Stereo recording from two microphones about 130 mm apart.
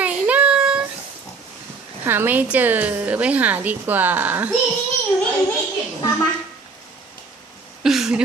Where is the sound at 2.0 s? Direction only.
15° right (ahead or behind).